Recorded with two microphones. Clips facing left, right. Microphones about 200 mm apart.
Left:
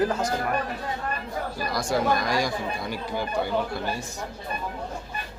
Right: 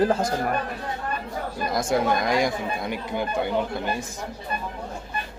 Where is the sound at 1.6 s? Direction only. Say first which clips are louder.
Right 2 dB; 20° right (ahead or behind).